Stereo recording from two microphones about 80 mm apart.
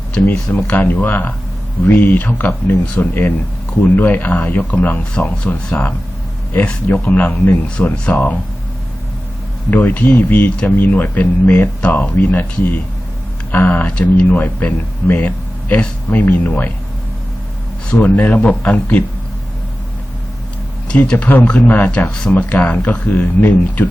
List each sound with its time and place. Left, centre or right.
0.1 s speech: centre
9.6 s speech: left
17.9 s speech: left
20.8 s speech: centre
22.1 s speech: centre